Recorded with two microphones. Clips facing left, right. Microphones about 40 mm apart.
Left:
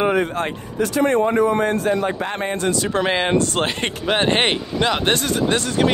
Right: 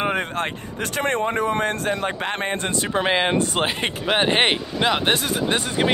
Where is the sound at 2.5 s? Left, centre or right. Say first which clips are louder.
Left 4 dB; right.